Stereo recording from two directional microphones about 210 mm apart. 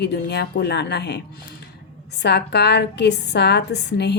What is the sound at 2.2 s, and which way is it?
Speech, 50° left (ahead or behind).